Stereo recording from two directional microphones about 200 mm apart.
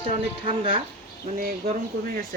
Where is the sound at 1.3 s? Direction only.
40° right (ahead or behind).